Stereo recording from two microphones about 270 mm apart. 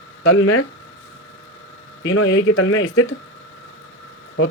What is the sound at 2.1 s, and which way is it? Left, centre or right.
Speech, left.